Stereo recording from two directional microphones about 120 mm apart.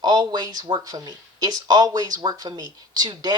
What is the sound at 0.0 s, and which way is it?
Speech, 35° right (ahead or behind).